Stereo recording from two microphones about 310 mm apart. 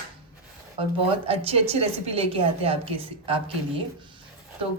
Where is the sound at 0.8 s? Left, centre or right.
Centre.